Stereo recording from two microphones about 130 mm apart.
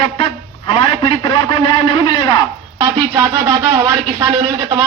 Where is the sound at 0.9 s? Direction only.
40° left (ahead or behind).